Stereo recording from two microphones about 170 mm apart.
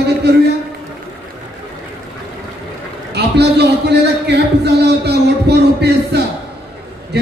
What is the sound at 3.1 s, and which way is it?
A man's voice, 75° right (ahead or behind).